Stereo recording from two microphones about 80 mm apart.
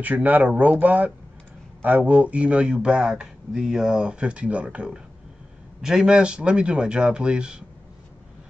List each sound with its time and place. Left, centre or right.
0.0 s speech: centre